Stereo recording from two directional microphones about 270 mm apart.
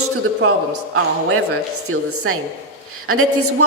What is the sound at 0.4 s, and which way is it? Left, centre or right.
Speech, right.